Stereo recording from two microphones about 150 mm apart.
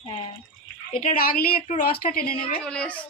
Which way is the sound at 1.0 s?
75° left (ahead or behind).